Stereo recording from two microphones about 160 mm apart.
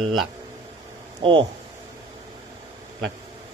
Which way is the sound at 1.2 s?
30° right (ahead or behind).